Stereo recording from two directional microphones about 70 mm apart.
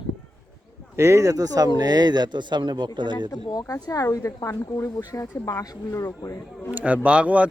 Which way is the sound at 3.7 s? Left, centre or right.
Left.